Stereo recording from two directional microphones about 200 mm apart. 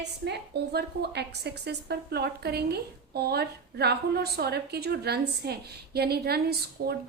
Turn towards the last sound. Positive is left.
turn(degrees=-50)  # may be behind; listen again after turning